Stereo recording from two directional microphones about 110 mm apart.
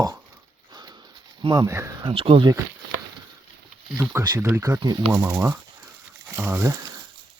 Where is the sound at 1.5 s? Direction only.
25° right (ahead or behind).